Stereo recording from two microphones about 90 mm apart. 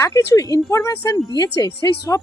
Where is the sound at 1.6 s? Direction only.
40° left (ahead or behind).